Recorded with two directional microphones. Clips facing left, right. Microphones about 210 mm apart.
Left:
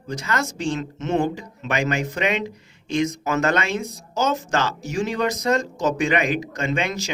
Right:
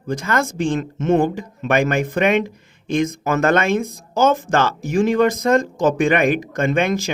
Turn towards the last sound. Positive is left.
turn(degrees=-55)  # may be behind; listen again after turning